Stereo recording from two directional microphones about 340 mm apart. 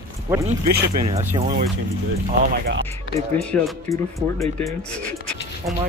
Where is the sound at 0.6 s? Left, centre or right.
Right.